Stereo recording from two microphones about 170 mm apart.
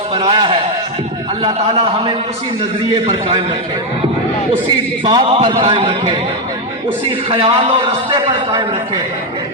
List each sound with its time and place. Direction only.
0.2 s a man's voice: 30° right (ahead or behind)
5.0 s a man's voice: 30° right (ahead or behind)
7.3 s a man's voice: 35° right (ahead or behind)